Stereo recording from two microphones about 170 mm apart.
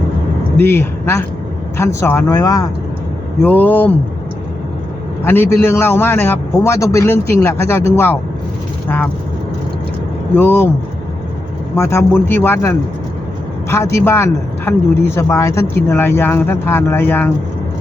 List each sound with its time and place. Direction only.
0.5 s a man's voice: 15° left (ahead or behind)
5.2 s a man's voice: 15° left (ahead or behind)
10.3 s a man's voice: 15° left (ahead or behind)
11.8 s a man's voice: 15° left (ahead or behind)